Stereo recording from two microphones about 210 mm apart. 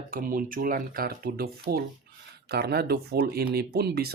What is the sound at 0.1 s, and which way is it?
Speech, 40° right (ahead or behind).